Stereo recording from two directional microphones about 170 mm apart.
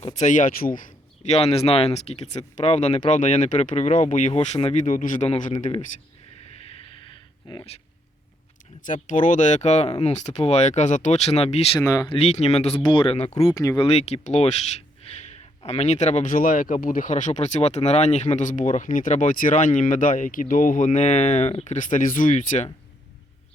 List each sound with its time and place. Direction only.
0.0 s speech: 45° left (ahead or behind)
6.7 s a sound: 35° left (ahead or behind)
8.8 s speech: 50° left (ahead or behind)
11.8 s speech: 20° left (ahead or behind)
12.1 s speech: 40° left (ahead or behind)
12.8 s speech: 30° left (ahead or behind)
13.5 s speech: 20° left (ahead or behind)
13.8 s speech: 40° left (ahead or behind)